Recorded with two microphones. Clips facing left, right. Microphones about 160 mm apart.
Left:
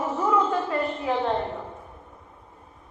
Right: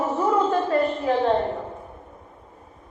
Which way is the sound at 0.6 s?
45° right (ahead or behind).